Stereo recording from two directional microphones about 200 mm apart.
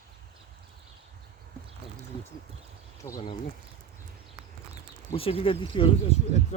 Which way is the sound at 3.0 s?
20° left (ahead or behind).